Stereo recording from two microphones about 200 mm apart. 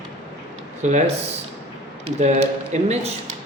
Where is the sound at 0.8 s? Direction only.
35° right (ahead or behind).